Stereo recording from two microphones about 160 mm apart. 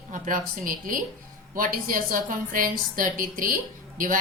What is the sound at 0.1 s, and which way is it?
A woman's voice, 60° right (ahead or behind).